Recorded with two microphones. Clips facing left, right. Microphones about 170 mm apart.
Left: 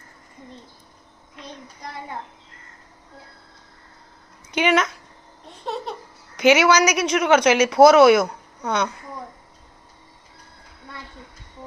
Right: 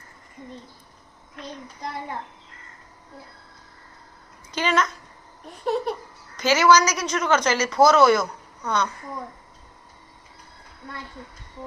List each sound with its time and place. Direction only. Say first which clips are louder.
4.5 s speech: left 4 dB; 65° left (ahead or behind)
5.5 s laughter: right 5 dB; 25° left (ahead or behind)
6.3 s a woman's voice: left 2 dB; 65° left (ahead or behind)